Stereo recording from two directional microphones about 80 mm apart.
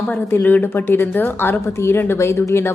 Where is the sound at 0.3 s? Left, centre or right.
Left.